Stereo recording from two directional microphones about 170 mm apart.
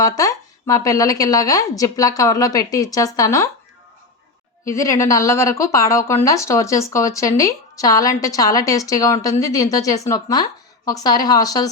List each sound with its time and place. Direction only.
0.0 s a woman's voice: 20° left (ahead or behind)
4.6 s a woman's voice: 15° left (ahead or behind)